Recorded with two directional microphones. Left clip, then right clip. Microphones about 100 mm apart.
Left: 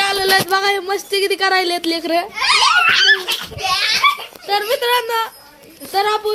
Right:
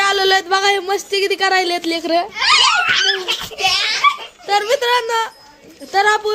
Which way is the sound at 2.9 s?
75° left (ahead or behind).